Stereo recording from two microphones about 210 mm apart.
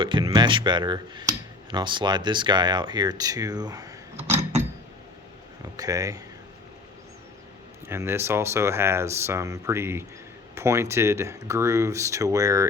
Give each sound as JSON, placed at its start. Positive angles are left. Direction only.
{"t": 0.0, "sound": "speech", "side_deg": -20}
{"t": 5.7, "sound": "speech", "side_deg": -15}
{"t": 7.9, "sound": "speech", "side_deg": -10}